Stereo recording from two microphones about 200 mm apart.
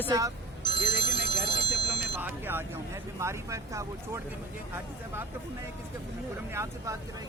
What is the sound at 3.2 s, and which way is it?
Speech, 15° right (ahead or behind).